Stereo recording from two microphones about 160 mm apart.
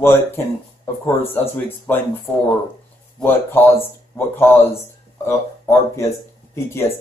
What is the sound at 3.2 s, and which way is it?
Speech, 10° left (ahead or behind).